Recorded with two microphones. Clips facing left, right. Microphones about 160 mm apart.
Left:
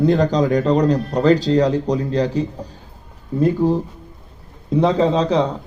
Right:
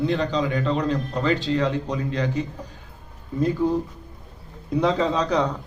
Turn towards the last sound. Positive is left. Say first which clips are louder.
# left 5 dB
turn(degrees=30)  # may be behind; listen again after turning